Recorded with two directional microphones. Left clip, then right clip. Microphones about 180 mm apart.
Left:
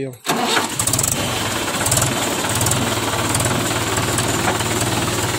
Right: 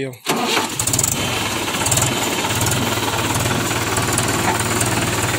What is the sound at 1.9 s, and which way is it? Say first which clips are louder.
Jackhammer: even; centre (ahead or behind).